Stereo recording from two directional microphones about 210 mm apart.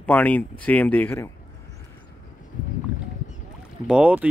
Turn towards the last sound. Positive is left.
turn(degrees=-5)  # may be behind; listen again after turning